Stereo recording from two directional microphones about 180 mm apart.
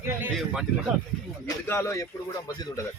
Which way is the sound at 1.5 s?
15° left (ahead or behind).